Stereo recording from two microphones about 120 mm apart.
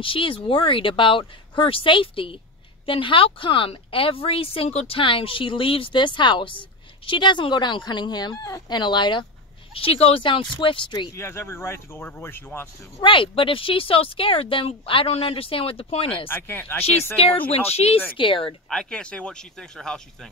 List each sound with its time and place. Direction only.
0.0 s a woman's voice: 45° left (ahead or behind)
9.8 s a woman's voice: 55° left (ahead or behind)
11.1 s speech: 20° left (ahead or behind)
13.0 s a woman's voice: 45° left (ahead or behind)
16.3 s speech: 15° left (ahead or behind)
17.5 s speech: 55° left (ahead or behind)
18.1 s a woman's voice: 45° left (ahead or behind)
18.7 s speech: 5° left (ahead or behind)